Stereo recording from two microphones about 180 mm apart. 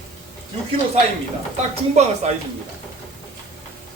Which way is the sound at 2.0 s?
40° right (ahead or behind).